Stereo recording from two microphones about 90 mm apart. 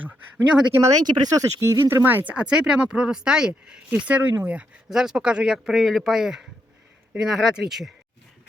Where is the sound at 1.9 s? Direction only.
25° right (ahead or behind).